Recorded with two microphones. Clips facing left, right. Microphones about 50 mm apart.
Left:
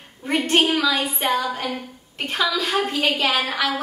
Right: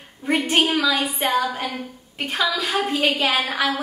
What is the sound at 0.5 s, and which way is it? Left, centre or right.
A woman's voice, centre.